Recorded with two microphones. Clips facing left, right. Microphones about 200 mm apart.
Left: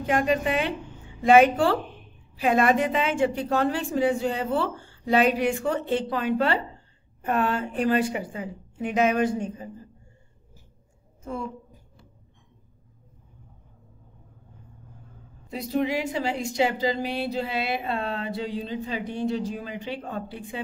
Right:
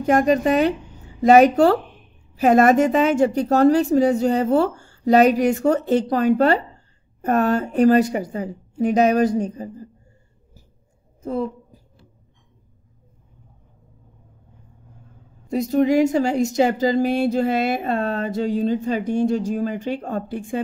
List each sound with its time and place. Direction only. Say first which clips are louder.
0.0 s a woman's voice: right 7 dB; 45° right (ahead or behind)
11.2 s a sound: right 8 dB; 35° right (ahead or behind)
15.5 s a woman's voice: right 9 dB; 45° right (ahead or behind)